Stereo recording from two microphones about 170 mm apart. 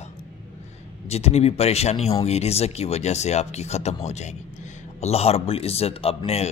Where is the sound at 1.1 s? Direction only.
40° left (ahead or behind).